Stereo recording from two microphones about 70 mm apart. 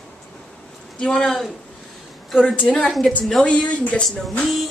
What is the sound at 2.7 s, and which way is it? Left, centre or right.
Speech, centre.